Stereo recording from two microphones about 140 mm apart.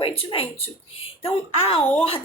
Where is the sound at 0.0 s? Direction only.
40° left (ahead or behind).